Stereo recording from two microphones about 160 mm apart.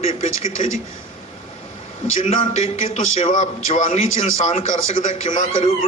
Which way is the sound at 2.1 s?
45° left (ahead or behind).